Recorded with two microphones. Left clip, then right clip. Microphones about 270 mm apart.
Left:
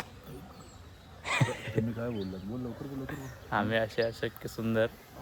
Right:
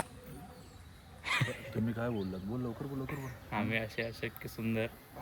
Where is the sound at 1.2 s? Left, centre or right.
Centre.